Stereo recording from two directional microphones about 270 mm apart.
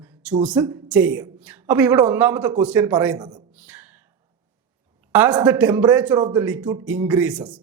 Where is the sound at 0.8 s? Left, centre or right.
Centre.